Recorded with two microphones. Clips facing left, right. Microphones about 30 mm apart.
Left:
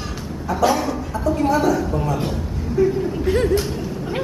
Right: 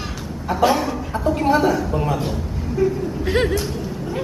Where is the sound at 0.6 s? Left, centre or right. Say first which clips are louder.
Right 1 dB; centre.